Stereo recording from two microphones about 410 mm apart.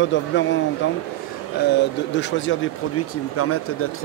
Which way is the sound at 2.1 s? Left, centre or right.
Left.